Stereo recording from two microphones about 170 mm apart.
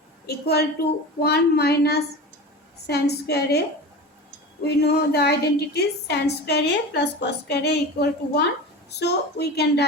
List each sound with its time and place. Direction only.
0.3 s a woman's voice: 70° left (ahead or behind)
4.6 s a woman's voice: 75° left (ahead or behind)